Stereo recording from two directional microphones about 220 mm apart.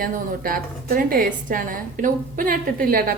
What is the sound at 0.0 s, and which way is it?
A woman's voice, 40° right (ahead or behind).